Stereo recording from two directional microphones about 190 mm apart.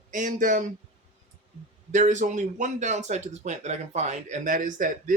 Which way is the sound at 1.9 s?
40° right (ahead or behind).